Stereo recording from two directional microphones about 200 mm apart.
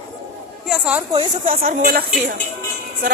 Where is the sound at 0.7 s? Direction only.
5° right (ahead or behind).